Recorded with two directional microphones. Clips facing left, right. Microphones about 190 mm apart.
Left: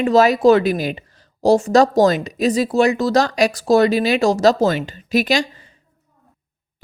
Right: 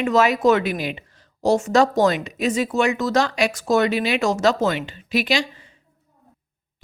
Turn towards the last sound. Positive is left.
turn(degrees=40)  # may be behind; listen again after turning